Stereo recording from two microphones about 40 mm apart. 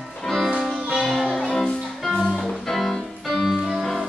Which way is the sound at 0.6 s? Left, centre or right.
Centre.